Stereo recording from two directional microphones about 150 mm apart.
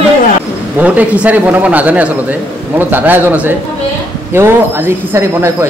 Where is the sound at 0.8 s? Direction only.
10° right (ahead or behind).